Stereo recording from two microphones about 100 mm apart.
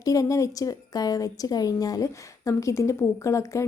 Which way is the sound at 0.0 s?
35° left (ahead or behind).